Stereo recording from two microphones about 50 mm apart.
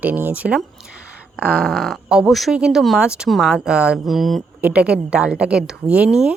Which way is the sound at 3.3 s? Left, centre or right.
Centre.